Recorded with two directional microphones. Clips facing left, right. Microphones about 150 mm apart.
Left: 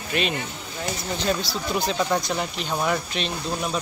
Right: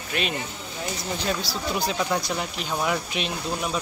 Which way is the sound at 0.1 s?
Centre (ahead or behind).